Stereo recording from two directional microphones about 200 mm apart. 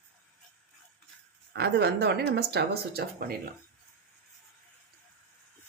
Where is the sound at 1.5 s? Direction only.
55° right (ahead or behind).